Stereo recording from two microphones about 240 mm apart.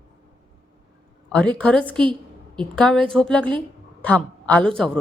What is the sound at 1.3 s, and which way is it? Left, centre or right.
A woman's voice, centre.